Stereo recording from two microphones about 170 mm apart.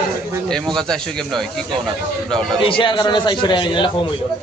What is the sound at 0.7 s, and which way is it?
Speech, 5° left (ahead or behind).